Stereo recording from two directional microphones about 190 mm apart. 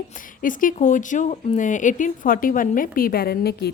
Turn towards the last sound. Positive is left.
turn(degrees=55)  # may be behind; listen again after turning